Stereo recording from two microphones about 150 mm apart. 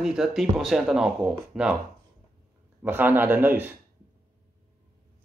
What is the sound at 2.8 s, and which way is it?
Speech, 15° right (ahead or behind).